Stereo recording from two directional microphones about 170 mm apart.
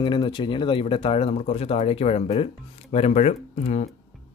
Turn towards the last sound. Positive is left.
turn(degrees=40)  # may be behind; listen again after turning